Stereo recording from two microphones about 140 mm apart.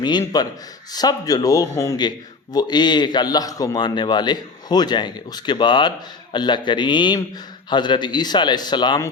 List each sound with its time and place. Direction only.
0.0 s a man's voice: 30° left (ahead or behind)